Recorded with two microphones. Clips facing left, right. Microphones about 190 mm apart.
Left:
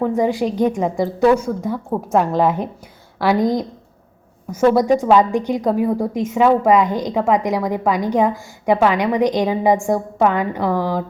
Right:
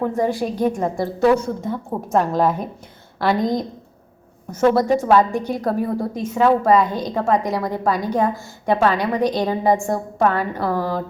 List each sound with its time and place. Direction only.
0.1 s a woman's voice: 15° left (ahead or behind)
3.4 s a woman's voice: 20° right (ahead or behind)
4.5 s a woman's voice: 15° left (ahead or behind)